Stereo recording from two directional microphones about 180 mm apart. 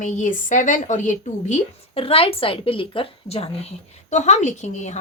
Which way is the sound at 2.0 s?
30° left (ahead or behind).